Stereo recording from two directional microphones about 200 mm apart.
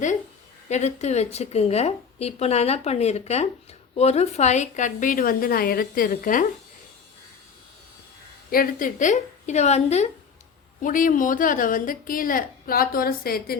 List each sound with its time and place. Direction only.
0.7 s speech: 35° left (ahead or behind)
8.4 s a woman's voice: 45° left (ahead or behind)